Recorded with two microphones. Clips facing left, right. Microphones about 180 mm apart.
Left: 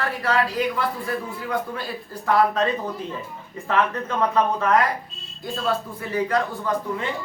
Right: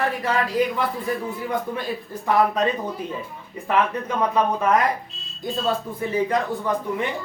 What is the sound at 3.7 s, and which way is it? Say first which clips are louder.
Speech: right 1 dB; 15° right (ahead or behind).